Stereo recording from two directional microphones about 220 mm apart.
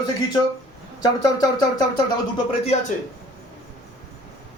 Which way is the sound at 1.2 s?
15° left (ahead or behind).